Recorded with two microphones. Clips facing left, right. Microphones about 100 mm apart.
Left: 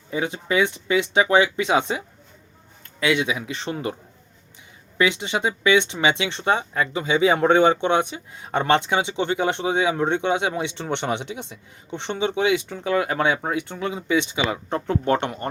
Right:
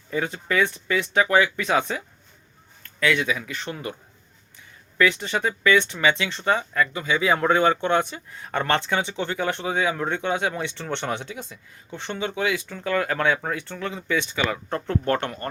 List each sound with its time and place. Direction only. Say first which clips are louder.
0.1 s speech: left 2 dB; 15° left (ahead or behind)
4.9 s speech: even; 20° left (ahead or behind)